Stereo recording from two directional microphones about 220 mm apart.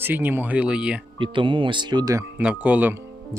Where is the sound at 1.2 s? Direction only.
20° right (ahead or behind).